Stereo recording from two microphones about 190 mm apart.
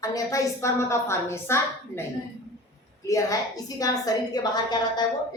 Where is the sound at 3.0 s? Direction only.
15° left (ahead or behind).